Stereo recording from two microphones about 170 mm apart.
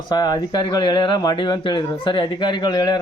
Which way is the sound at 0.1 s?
25° left (ahead or behind).